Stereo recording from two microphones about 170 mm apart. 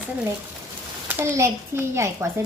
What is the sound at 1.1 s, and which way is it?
A child's voice, 15° right (ahead or behind).